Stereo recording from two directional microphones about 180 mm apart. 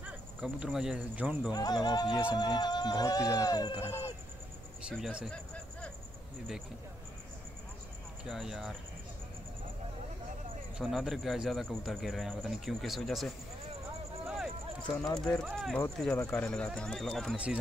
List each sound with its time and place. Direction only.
0.0 s speech: 5° right (ahead or behind)
1.5 s speech: 20° left (ahead or behind)
4.8 s speech: 5° right (ahead or behind)
8.3 s speech: centre (ahead or behind)
10.8 s speech: centre (ahead or behind)
14.2 s a sound: centre (ahead or behind)
15.1 s speech: 5° left (ahead or behind)